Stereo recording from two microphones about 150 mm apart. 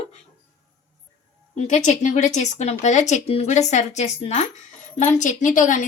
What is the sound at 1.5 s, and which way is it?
A woman's voice, 55° left (ahead or behind).